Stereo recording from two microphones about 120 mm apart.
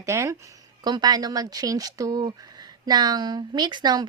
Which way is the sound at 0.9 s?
35° right (ahead or behind).